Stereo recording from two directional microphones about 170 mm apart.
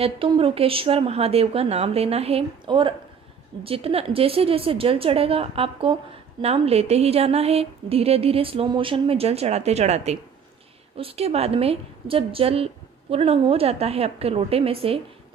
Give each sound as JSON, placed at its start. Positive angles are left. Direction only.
{"t": 0.0, "sound": "a woman's voice", "side_deg": -35}